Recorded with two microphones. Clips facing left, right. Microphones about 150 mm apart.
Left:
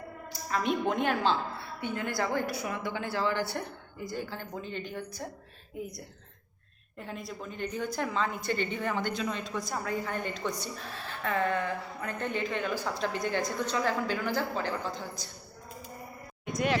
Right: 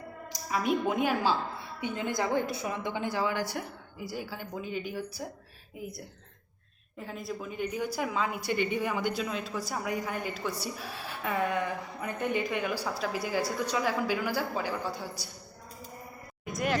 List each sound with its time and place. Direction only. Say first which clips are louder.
0.3 s a woman's voice: right 1 dB; 5° right (ahead or behind)
1.8 s a woman's voice: right 1 dB; 20° right (ahead or behind)
16.5 s a sound: left 2 dB; centre (ahead or behind)